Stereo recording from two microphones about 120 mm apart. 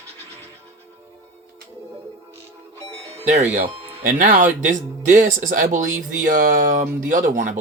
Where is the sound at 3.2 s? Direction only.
65° right (ahead or behind).